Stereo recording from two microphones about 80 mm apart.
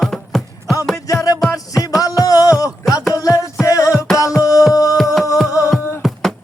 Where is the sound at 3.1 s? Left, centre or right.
Left.